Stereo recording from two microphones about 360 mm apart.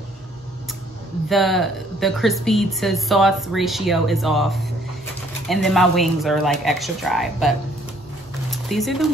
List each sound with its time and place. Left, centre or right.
1.3 s speech: centre